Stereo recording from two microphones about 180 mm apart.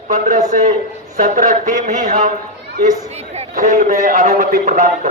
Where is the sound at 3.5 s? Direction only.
50° right (ahead or behind).